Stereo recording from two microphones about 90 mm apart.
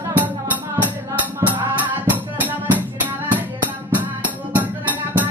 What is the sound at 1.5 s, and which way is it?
Music, 20° right (ahead or behind).